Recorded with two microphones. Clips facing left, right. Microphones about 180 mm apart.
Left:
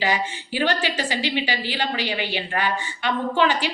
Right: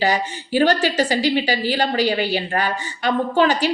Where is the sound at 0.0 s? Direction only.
40° right (ahead or behind).